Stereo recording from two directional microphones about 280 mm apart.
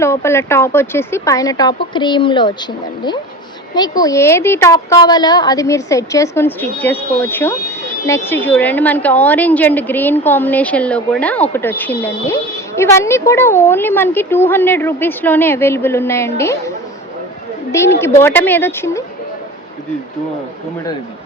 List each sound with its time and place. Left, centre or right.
0.0 s speech: centre
3.8 s a woman's voice: centre